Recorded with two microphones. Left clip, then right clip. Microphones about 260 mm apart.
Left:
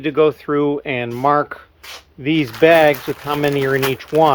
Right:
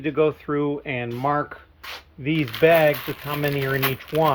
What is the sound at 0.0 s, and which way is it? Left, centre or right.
Speech, left.